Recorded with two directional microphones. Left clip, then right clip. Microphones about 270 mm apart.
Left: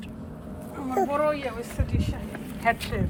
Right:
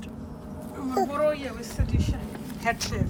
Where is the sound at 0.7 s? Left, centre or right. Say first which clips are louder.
Left 2 dB; centre.